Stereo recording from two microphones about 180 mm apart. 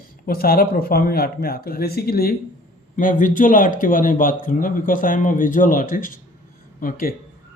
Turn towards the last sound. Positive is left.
turn(degrees=50)  # may be behind; listen again after turning